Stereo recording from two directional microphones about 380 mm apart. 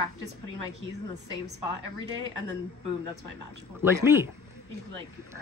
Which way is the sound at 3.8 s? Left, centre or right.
Centre.